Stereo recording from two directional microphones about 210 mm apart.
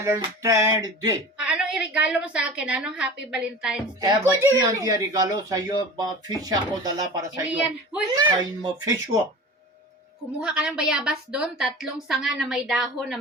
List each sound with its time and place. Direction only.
0.0 s speech: 15° right (ahead or behind)
1.5 s a woman's voice: 5° right (ahead or behind); by 8.9 s 20° right (ahead or behind)
10.4 s a woman's voice: 5° right (ahead or behind)